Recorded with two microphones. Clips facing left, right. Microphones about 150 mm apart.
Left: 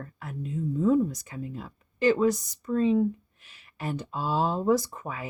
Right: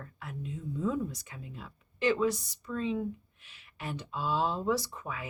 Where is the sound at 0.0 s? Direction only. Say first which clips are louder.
Left 4 dB; 45° left (ahead or behind).